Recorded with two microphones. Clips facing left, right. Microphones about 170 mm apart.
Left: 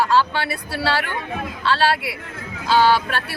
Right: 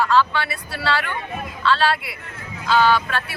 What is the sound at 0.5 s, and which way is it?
Speech, 35° left (ahead or behind).